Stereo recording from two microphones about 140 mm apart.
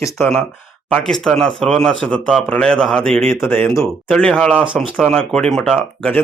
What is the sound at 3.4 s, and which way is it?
Speech, 15° left (ahead or behind).